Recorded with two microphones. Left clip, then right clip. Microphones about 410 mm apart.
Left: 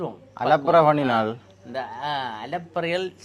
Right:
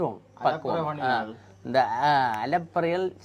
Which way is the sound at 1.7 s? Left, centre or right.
Right.